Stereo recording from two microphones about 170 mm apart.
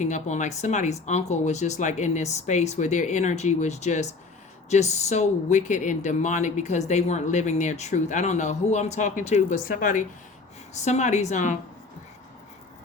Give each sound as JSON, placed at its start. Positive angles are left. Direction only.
{"t": 0.0, "sound": "speech", "side_deg": 45}